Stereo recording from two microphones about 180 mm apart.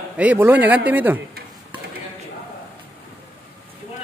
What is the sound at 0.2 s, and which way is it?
Speech, 10° right (ahead or behind).